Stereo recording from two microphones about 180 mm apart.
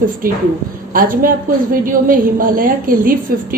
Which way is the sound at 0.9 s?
50° right (ahead or behind).